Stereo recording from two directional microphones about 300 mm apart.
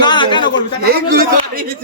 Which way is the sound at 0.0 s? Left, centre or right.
Centre.